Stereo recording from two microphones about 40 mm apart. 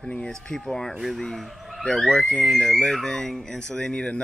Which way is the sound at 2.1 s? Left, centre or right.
Centre.